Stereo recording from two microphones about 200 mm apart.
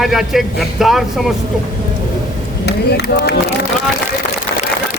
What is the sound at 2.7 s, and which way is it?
Speech, 55° left (ahead or behind).